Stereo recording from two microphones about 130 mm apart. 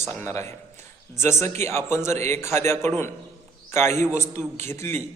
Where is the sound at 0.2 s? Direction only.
20° left (ahead or behind).